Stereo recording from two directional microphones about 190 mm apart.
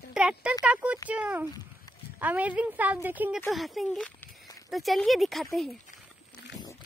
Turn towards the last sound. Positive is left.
turn(degrees=0)  # may be behind; listen again after turning